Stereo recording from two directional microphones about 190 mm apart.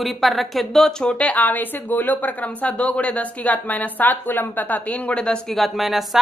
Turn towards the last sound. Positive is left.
turn(degrees=0)  # may be behind; listen again after turning